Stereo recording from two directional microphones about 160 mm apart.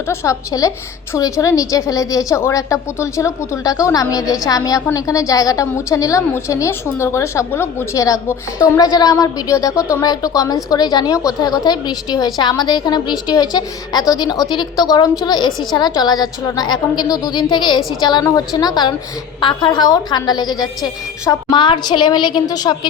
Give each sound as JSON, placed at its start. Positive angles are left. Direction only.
{"t": 0.1, "sound": "a woman's voice", "side_deg": 20}